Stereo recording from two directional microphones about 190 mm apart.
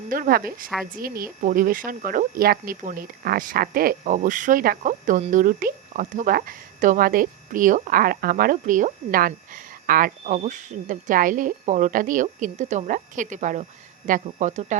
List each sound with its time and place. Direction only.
0.1 s speech: 50° right (ahead or behind)